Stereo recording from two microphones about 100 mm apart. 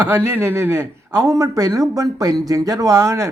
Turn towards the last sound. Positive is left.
turn(degrees=-30)  # may be behind; listen again after turning